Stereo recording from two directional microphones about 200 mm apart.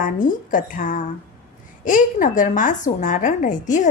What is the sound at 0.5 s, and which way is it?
A woman's voice, 40° left (ahead or behind).